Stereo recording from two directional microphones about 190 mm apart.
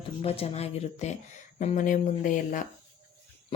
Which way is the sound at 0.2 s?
30° left (ahead or behind).